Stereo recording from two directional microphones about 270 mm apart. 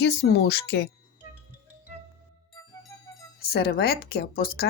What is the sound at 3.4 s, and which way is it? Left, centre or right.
Speech, left.